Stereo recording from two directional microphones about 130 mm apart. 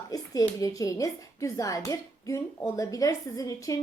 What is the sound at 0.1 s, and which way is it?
A woman's voice, 25° left (ahead or behind).